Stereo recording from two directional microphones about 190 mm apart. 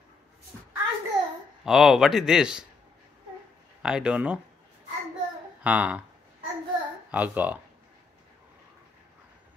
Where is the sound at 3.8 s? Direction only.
5° right (ahead or behind).